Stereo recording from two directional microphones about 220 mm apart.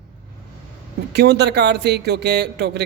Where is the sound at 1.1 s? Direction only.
50° right (ahead or behind).